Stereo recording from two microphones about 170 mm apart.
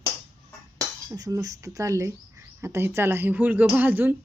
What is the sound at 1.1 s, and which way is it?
A woman's voice, 20° right (ahead or behind).